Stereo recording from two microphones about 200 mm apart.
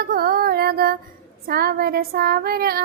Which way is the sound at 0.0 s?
50° right (ahead or behind).